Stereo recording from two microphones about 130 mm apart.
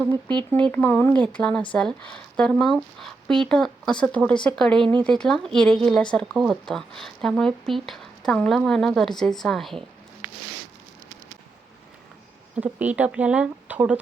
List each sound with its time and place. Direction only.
0.5 s speech: 15° left (ahead or behind)
12.5 s speech: 10° right (ahead or behind)